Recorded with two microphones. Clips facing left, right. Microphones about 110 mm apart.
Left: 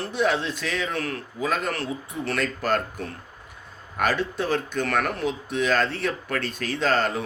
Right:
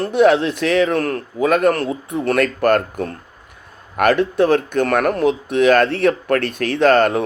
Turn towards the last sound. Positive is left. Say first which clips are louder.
# right 10 dB
turn(degrees=-60)  # may be behind; listen again after turning